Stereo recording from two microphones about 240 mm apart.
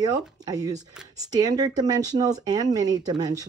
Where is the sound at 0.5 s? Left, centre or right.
Centre.